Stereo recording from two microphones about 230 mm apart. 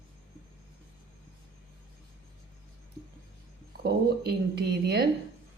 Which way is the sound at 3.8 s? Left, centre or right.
Right.